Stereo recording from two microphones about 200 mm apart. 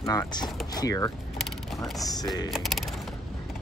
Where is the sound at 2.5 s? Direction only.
Centre (ahead or behind).